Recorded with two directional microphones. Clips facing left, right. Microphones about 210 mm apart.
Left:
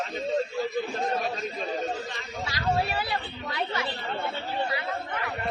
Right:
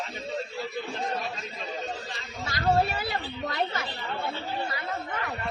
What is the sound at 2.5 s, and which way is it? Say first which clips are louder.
A woman's voice: right 3 dB; 45° right (ahead or behind).